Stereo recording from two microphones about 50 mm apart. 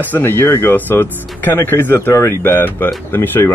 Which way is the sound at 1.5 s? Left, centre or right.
Left.